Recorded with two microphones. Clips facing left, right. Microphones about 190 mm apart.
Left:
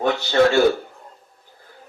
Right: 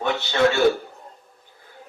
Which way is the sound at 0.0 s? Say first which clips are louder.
Left 3 dB; 40° left (ahead or behind).